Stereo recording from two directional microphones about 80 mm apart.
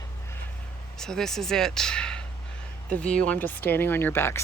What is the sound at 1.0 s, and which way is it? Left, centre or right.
Speech, centre.